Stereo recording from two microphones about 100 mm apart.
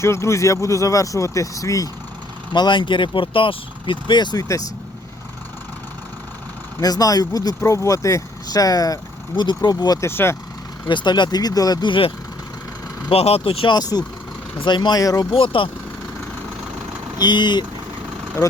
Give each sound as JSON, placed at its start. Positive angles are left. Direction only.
{"t": 0.0, "sound": "speech", "side_deg": 30}
{"t": 2.5, "sound": "speech", "side_deg": 50}
{"t": 6.8, "sound": "speech", "side_deg": 40}
{"t": 10.0, "sound": "speech", "side_deg": 25}
{"t": 10.8, "sound": "speech", "side_deg": 50}
{"t": 13.1, "sound": "speech", "side_deg": 85}
{"t": 13.7, "sound": "speech", "side_deg": 40}
{"t": 15.0, "sound": "speech", "side_deg": 35}
{"t": 15.3, "sound": "speech", "side_deg": 60}
{"t": 17.2, "sound": "speech", "side_deg": 45}